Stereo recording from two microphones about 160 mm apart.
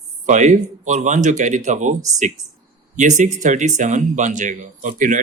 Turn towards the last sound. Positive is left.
turn(degrees=-50)  # may be behind; listen again after turning